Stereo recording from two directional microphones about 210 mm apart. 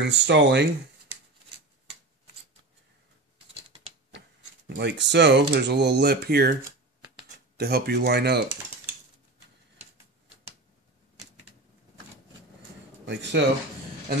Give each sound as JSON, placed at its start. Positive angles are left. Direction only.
{"t": 0.0, "sound": "speech", "side_deg": -55}
{"t": 4.6, "sound": "speech", "side_deg": -55}
{"t": 7.5, "sound": "speech", "side_deg": -50}
{"t": 13.0, "sound": "speech", "side_deg": -55}